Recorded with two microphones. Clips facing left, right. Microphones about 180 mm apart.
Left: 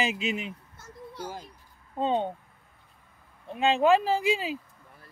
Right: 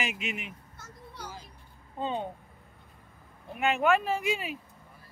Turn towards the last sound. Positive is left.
turn(degrees=30)  # may be behind; listen again after turning